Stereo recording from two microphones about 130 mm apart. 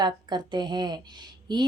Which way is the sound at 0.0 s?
35° right (ahead or behind).